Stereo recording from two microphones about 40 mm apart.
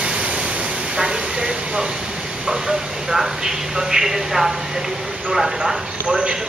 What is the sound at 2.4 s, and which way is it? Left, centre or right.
A man's voice, centre.